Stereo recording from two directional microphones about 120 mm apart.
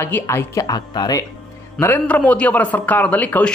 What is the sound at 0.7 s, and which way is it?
Speech, 35° left (ahead or behind).